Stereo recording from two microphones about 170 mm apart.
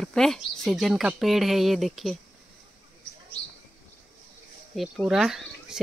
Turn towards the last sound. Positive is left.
turn(degrees=0)  # may be behind; listen again after turning